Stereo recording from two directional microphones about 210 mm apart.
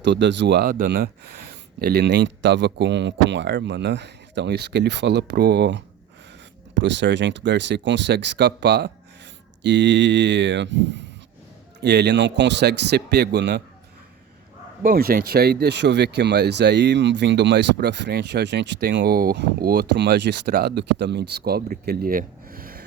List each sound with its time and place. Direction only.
0.0 s speech: 55° right (ahead or behind)
14.8 s speech: 45° right (ahead or behind)